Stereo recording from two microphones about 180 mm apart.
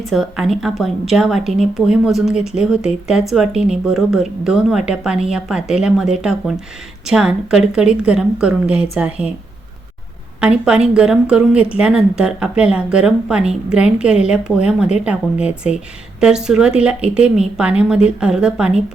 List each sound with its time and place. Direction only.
0.0 s a woman's voice: centre (ahead or behind)
10.4 s a woman's voice: 5° right (ahead or behind)